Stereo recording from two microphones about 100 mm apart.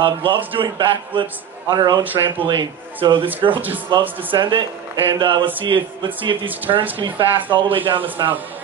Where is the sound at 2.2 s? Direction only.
55° right (ahead or behind).